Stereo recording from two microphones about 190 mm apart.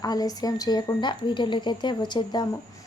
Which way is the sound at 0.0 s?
20° left (ahead or behind).